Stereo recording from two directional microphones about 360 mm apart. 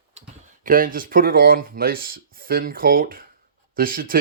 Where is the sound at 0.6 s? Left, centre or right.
Right.